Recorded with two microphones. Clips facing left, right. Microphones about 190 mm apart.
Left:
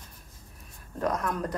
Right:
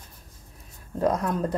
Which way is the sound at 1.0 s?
25° right (ahead or behind).